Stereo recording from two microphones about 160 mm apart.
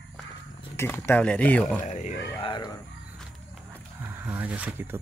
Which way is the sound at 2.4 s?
25° left (ahead or behind).